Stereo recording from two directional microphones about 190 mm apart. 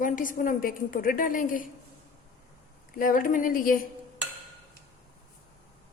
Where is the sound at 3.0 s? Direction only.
45° left (ahead or behind).